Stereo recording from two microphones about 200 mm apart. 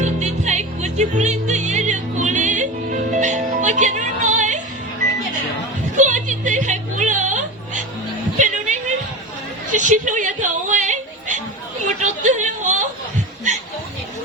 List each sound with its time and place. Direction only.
0.0 s music: 35° right (ahead or behind)
6.0 s music: 35° right (ahead or behind)
9.7 s a sound: 40° right (ahead or behind)